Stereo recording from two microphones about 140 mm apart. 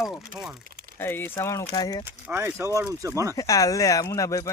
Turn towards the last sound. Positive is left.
turn(degrees=20)  # may be behind; listen again after turning